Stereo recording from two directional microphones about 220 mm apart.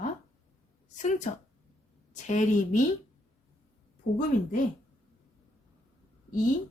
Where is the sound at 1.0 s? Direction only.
35° left (ahead or behind).